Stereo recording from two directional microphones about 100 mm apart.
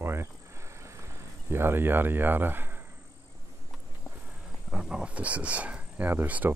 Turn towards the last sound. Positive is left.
turn(degrees=-20)  # may be behind; listen again after turning